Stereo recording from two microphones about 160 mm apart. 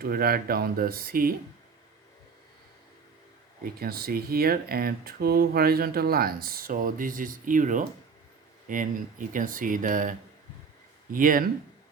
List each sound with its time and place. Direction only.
0.0 s speech: 70° right (ahead or behind)
3.6 s speech: 70° right (ahead or behind)